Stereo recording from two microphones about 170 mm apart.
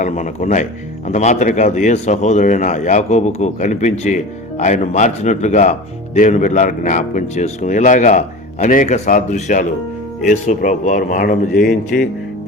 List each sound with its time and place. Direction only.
0.0 s speech: 45° left (ahead or behind)